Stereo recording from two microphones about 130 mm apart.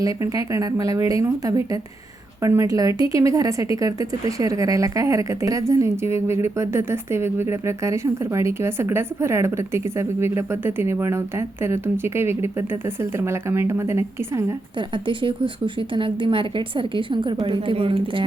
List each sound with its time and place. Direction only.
0.0 s speech: 30° right (ahead or behind)
14.8 s a woman's voice: 40° right (ahead or behind)